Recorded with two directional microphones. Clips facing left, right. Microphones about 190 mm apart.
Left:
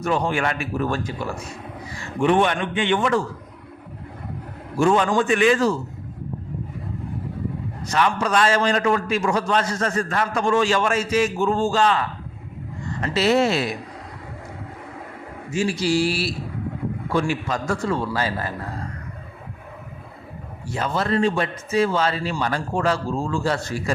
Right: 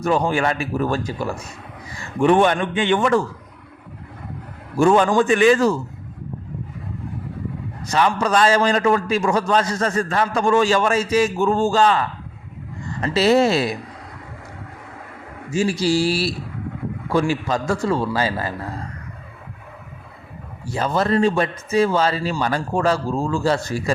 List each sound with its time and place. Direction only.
0.0 s a man's voice: 35° right (ahead or behind)
2.2 s a man's voice: 45° right (ahead or behind)
4.8 s a man's voice: 40° right (ahead or behind)
7.9 s a man's voice: 35° right (ahead or behind)
11.3 s a man's voice: 50° right (ahead or behind)
13.0 s a man's voice: 35° right (ahead or behind)
15.5 s a man's voice: 35° right (ahead or behind)
20.7 s a man's voice: 35° right (ahead or behind)